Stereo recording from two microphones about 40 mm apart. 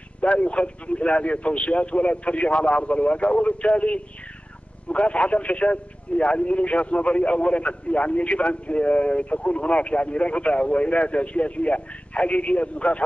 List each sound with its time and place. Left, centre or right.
0.2 s speech: left